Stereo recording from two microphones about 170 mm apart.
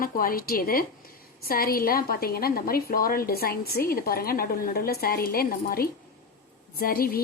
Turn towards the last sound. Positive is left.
turn(degrees=60)  # may be behind; listen again after turning